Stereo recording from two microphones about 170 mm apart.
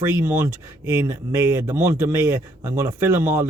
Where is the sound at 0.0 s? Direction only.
15° right (ahead or behind).